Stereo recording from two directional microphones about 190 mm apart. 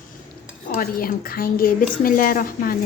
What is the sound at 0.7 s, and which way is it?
A woman's voice, 50° left (ahead or behind).